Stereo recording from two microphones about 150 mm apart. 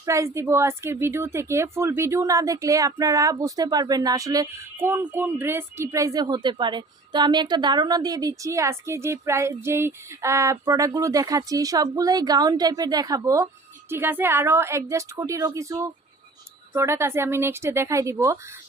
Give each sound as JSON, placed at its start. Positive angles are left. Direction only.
{"t": 0.0, "sound": "a woman's voice", "side_deg": -20}